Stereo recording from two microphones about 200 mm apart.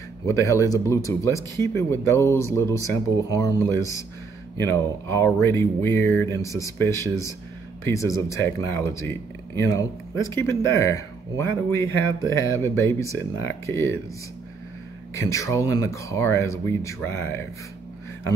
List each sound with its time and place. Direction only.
0.2 s speech: 15° left (ahead or behind)
15.1 s speech: 15° left (ahead or behind)